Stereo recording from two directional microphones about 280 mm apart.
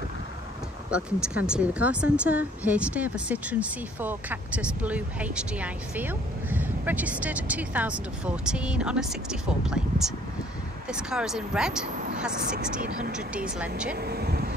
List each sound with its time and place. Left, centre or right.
0.8 s a woman's voice: centre
12.4 s speech: right
13.9 s speech: right